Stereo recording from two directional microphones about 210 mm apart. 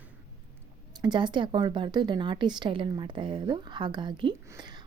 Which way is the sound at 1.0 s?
20° right (ahead or behind).